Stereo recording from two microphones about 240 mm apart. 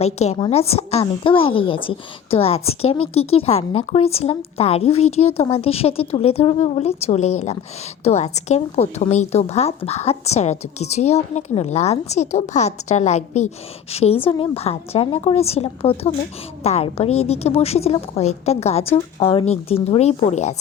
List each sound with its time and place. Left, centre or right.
0.0 s a woman's voice: left